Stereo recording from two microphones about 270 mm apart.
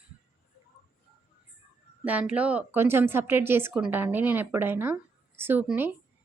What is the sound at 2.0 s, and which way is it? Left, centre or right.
A woman's voice, centre.